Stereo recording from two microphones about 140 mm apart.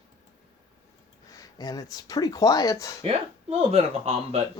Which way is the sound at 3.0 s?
45° right (ahead or behind).